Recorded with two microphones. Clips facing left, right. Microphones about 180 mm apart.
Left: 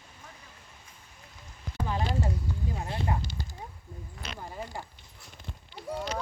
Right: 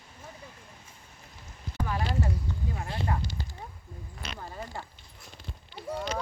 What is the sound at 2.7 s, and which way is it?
Speech, 20° left (ahead or behind).